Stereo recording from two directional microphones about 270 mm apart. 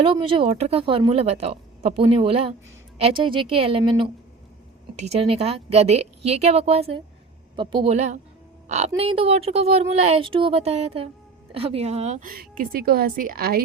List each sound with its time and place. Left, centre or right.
0.0 s a woman's voice: centre